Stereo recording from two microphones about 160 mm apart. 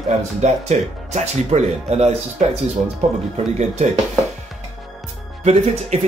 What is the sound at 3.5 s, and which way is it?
Speech, 45° right (ahead or behind).